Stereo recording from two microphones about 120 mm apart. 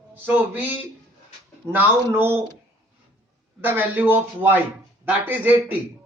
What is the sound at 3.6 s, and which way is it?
Speech, 15° right (ahead or behind).